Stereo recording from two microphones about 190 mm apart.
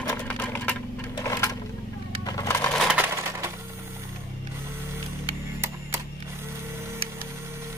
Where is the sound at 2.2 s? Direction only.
15° left (ahead or behind); by 3.5 s 15° right (ahead or behind).